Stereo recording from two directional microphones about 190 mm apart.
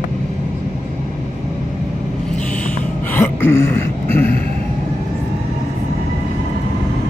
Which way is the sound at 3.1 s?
10° left (ahead or behind).